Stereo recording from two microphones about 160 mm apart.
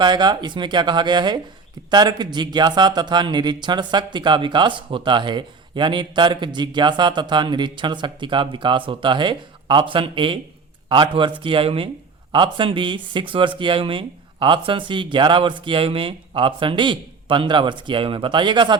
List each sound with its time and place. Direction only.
0.0 s speech: 25° right (ahead or behind)